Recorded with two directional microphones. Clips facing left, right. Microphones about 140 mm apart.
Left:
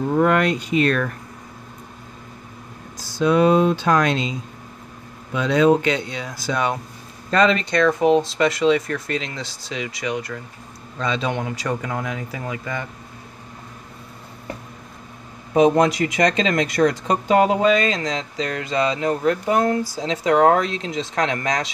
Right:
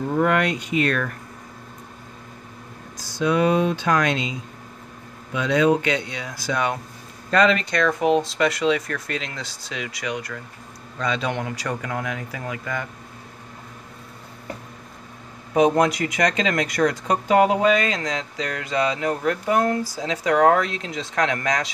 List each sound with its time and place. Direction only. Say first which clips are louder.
0.2 s speech: left 2 dB; 35° left (ahead or behind)
3.0 s speech: left 3 dB; 30° left (ahead or behind)
15.5 s speech: left 2 dB; 25° left (ahead or behind)